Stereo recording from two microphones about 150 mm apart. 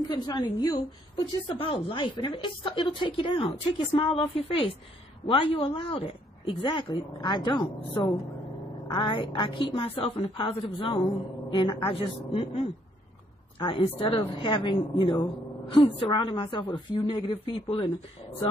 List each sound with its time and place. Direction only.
0.1 s a woman's voice: 30° left (ahead or behind)